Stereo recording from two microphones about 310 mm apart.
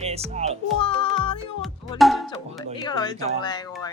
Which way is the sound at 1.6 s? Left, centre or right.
Centre.